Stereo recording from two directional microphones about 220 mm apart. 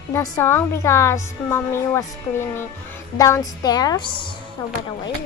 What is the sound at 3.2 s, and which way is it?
A woman's voice, 15° left (ahead or behind).